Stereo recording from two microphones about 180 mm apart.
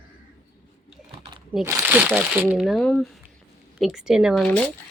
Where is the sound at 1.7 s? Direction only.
10° right (ahead or behind).